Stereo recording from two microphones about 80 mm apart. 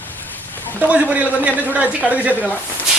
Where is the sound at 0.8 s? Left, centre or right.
Centre.